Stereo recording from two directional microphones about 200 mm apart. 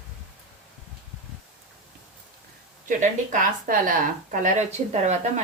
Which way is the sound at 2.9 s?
40° right (ahead or behind).